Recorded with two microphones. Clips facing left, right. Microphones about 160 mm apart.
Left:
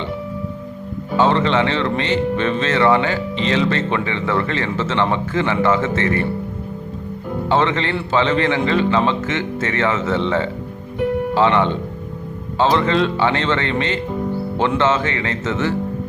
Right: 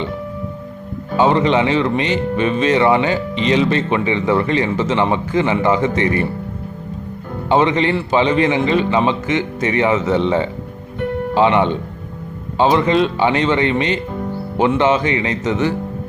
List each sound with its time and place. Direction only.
1.1 s speech: 15° right (ahead or behind)
7.5 s speech: 15° right (ahead or behind)